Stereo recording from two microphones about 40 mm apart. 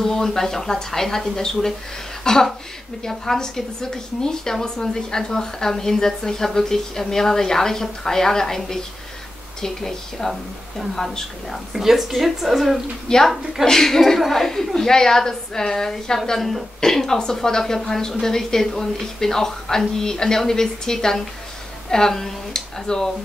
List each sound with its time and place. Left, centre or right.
0.0 s a woman's voice: centre
11.7 s speech: centre
13.1 s a woman's voice: centre